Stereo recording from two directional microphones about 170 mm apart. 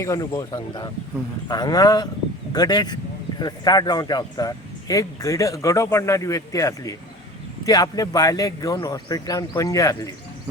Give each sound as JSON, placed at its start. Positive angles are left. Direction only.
{"t": 0.0, "sound": "speech", "side_deg": 20}